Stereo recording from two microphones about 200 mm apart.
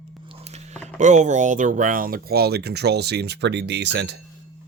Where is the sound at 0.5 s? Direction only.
35° right (ahead or behind).